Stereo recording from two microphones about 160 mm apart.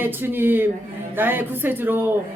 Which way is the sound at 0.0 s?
15° right (ahead or behind).